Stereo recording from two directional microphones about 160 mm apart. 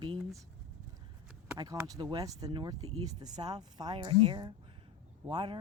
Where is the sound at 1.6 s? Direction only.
25° right (ahead or behind).